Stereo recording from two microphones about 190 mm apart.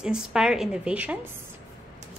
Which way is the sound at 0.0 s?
5° right (ahead or behind).